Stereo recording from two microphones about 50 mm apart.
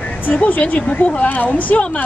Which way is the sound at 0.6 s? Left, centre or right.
Left.